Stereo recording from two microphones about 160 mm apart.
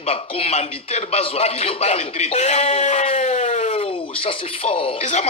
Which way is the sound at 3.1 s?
50° left (ahead or behind).